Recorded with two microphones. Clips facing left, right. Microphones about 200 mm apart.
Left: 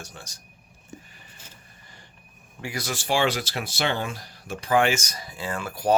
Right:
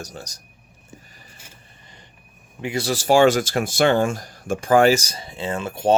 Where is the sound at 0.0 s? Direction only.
40° right (ahead or behind).